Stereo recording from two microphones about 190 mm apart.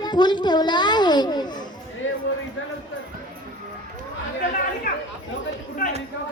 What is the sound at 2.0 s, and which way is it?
Speech, 85° left.